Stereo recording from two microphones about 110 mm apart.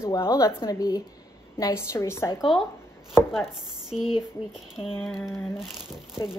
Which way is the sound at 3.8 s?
5° right (ahead or behind).